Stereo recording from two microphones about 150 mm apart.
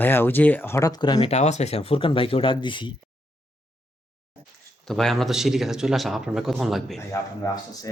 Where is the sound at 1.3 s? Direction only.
50° left (ahead or behind); by 2.9 s 30° left (ahead or behind).